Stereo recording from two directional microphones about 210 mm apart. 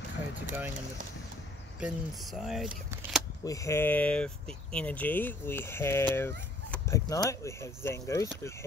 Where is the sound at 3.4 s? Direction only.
15° left (ahead or behind).